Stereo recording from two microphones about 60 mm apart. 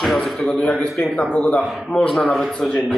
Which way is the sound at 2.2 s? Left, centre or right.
Centre.